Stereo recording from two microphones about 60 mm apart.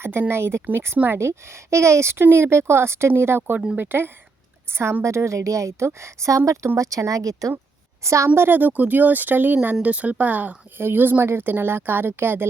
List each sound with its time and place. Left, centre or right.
0.0 s speech: right
1.5 s a woman's voice: right
8.0 s a woman's voice: right
8.4 s speech: right